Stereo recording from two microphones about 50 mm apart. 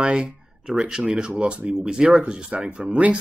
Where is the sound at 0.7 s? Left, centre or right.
Centre.